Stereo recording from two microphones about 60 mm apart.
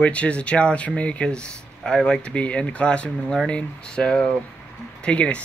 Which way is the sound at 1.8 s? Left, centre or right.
Centre.